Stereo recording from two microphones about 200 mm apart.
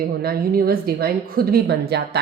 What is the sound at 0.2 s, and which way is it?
A woman's voice, 50° right (ahead or behind).